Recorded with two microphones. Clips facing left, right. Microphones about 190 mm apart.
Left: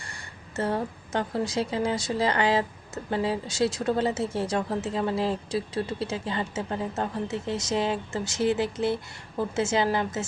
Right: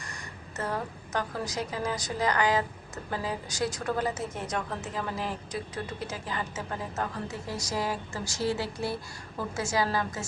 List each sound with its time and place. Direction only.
0.0 s a woman's voice: 30° left (ahead or behind)